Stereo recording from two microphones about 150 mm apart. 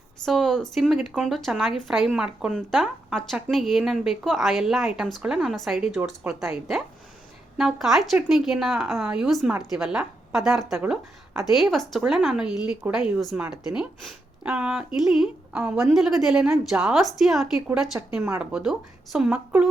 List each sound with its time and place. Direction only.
0.3 s speech: centre (ahead or behind)
18.2 s speech: 20° right (ahead or behind)
18.5 s speech: centre (ahead or behind)